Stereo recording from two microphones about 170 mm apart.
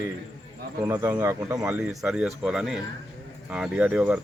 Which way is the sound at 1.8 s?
5° right (ahead or behind).